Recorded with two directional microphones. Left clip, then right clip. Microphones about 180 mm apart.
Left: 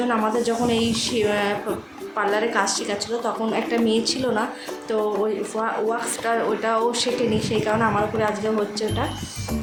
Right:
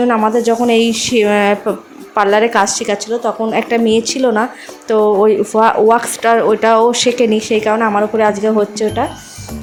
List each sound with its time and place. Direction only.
0.1 s speech: 40° right (ahead or behind)